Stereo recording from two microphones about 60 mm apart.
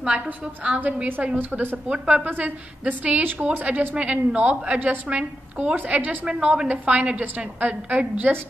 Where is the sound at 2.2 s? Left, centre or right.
Right.